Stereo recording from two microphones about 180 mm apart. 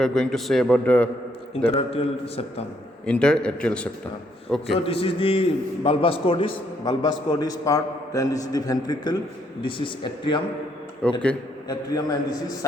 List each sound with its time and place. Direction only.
0.0 s a man's voice: centre (ahead or behind)
1.6 s a man's voice: 35° left (ahead or behind)
3.1 s a man's voice: 5° left (ahead or behind)
4.9 s a man's voice: 30° left (ahead or behind)
11.0 s a man's voice: 5° left (ahead or behind)
11.7 s a man's voice: 20° left (ahead or behind)